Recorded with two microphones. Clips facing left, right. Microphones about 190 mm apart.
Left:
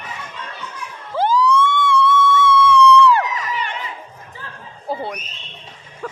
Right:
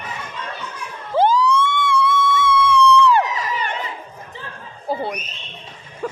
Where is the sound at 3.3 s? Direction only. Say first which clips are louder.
Right 1 dB; 45° right (ahead or behind).